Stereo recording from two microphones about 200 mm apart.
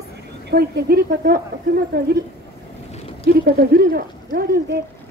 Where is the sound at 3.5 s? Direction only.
45° right (ahead or behind).